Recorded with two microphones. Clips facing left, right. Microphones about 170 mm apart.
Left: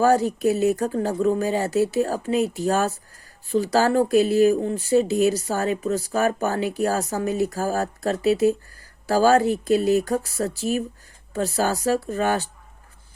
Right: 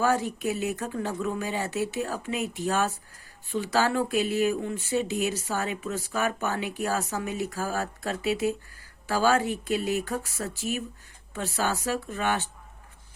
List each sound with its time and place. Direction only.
0.0 s speech: 40° left (ahead or behind)